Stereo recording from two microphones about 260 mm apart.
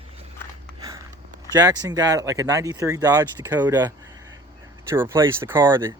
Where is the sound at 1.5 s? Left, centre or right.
Centre.